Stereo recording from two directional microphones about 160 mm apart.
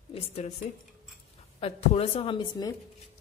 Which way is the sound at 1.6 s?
40° left (ahead or behind).